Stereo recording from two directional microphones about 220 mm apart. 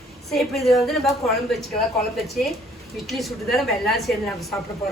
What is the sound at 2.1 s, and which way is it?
A woman's voice, centre (ahead or behind).